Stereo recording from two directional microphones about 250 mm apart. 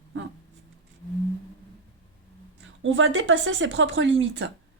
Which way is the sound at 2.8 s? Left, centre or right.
Right.